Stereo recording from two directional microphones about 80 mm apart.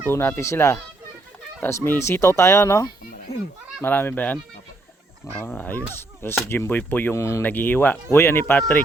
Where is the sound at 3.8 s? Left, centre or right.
Left.